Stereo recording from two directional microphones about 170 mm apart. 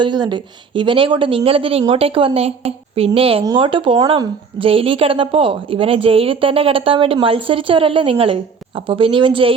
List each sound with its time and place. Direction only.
0.0 s a woman's voice: 25° right (ahead or behind)